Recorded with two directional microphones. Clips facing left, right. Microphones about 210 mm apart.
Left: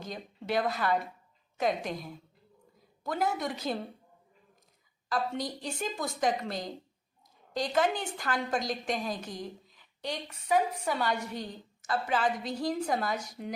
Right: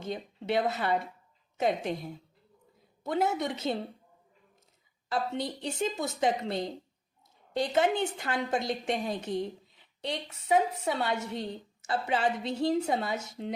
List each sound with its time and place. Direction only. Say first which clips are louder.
0.0 s a woman's voice: right 4 dB; 25° right (ahead or behind)
5.1 s a woman's voice: right 1 dB; 25° right (ahead or behind)